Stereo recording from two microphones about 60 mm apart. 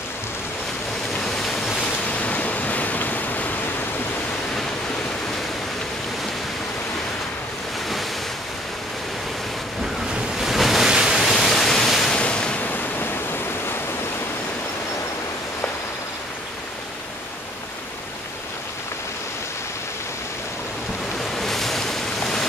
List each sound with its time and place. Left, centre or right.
1.1 s train: centre
2.0 s waves: left
10.4 s waves: centre
11.1 s waterfall: centre
12.2 s waves: centre
12.6 s waterfall: left
21.4 s waves: centre